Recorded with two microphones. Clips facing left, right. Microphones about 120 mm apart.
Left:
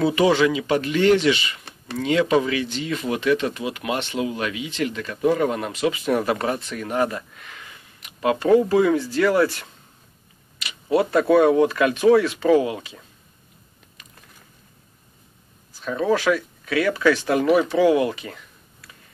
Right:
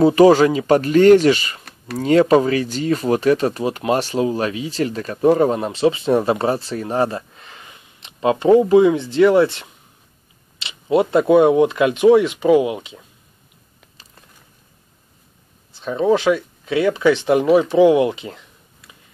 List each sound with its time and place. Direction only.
0.0 s speech: 40° right (ahead or behind); by 13.0 s 20° right (ahead or behind)
14.0 s a sound: 30° right (ahead or behind)
15.7 s speech: 20° right (ahead or behind)